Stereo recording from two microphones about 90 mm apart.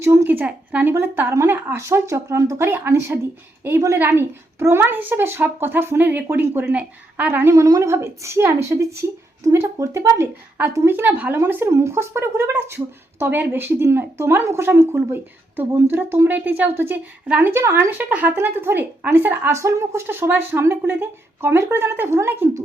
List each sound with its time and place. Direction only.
0.0 s a sound: 30° right (ahead or behind)
0.3 s a woman's voice: 20° right (ahead or behind)
7.5 s a woman's voice: 35° right (ahead or behind)
10.9 s speech: 20° right (ahead or behind)
11.3 s speech: 30° right (ahead or behind)
17.5 s speech: 30° right (ahead or behind)
19.5 s speech: 35° right (ahead or behind)